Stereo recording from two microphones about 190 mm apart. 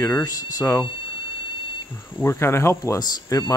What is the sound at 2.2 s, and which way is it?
Speech, 15° left (ahead or behind).